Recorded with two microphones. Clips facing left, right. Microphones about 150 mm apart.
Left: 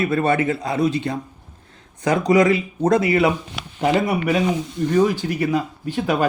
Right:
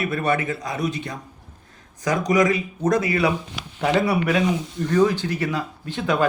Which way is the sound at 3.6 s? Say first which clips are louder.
Left 2 dB; 65° left (ahead or behind).